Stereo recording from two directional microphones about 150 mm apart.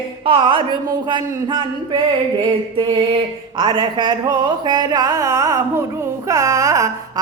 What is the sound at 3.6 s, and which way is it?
Speech, 30° right (ahead or behind).